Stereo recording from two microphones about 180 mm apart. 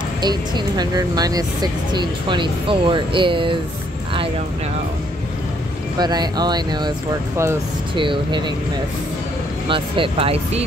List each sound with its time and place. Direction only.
0.2 s speech: 20° right (ahead or behind)
5.9 s speech: 25° right (ahead or behind)
7.9 s speech: 25° right (ahead or behind)
9.7 s speech: 30° right (ahead or behind)